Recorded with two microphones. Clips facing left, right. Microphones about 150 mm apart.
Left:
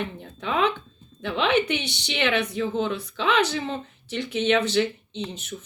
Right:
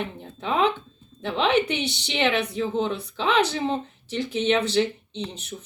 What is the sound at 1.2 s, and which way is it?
Speech, 30° right (ahead or behind).